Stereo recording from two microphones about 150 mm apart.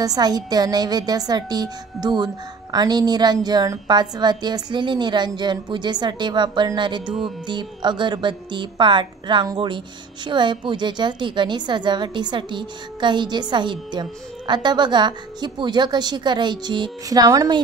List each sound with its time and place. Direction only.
0.0 s a woman's voice: 25° right (ahead or behind)